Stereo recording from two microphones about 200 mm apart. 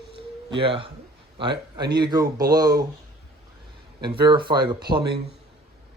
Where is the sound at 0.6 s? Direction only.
25° right (ahead or behind).